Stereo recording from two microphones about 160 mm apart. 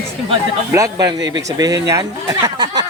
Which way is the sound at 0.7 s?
20° right (ahead or behind).